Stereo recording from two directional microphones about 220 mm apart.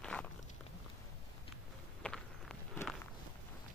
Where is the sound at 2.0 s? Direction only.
5° left (ahead or behind).